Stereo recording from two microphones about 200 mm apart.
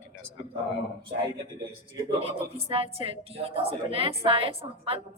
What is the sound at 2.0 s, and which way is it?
A woman's voice, 30° right (ahead or behind).